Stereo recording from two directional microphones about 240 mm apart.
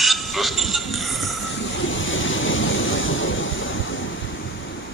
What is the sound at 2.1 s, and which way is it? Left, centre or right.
Vehicle, left.